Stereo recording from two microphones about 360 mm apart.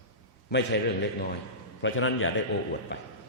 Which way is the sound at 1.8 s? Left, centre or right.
Left.